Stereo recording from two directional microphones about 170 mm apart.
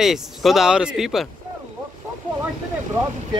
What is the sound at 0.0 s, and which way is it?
Speech, centre (ahead or behind).